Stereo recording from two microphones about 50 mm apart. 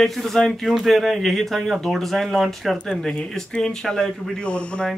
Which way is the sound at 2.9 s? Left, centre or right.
Centre.